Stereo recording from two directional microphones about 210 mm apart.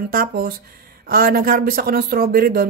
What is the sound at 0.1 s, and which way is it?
A woman's voice, 45° right (ahead or behind).